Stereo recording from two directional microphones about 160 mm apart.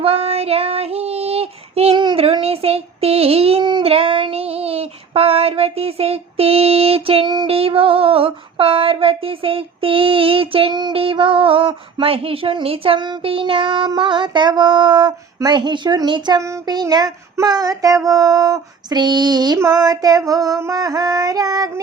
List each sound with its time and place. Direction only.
0.0 s child singing: 40° right (ahead or behind); by 21.7 s 25° right (ahead or behind)